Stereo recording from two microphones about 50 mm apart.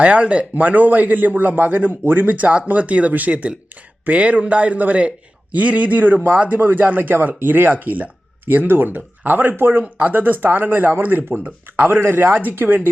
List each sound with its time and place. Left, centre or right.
0.0 s a man's voice: right
10.0 s a man's voice: right
11.9 s a man's voice: right